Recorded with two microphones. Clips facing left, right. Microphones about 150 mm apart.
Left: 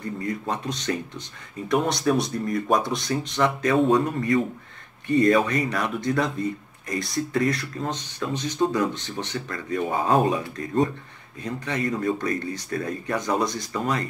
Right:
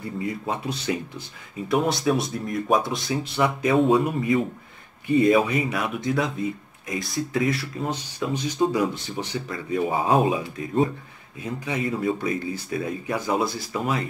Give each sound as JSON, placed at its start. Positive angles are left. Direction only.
{"t": 0.0, "sound": "speech", "side_deg": -10}